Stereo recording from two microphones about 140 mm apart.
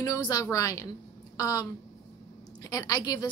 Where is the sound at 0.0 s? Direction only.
25° left (ahead or behind).